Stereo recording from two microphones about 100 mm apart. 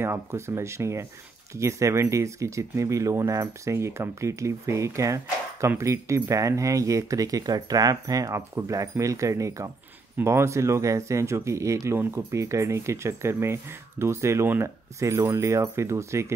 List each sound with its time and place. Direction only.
0.0 s speech: 25° right (ahead or behind)